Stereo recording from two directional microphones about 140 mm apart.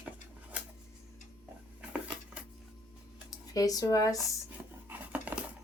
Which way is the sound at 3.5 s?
25° left (ahead or behind).